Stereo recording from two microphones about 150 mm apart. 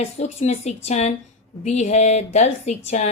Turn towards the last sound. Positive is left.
turn(degrees=50)  # may be behind; listen again after turning